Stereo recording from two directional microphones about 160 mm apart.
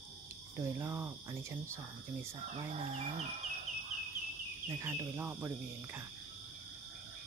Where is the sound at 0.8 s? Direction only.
15° right (ahead or behind).